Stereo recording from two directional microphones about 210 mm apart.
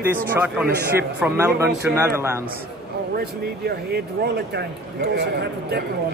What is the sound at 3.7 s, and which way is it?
Speech, 50° right (ahead or behind).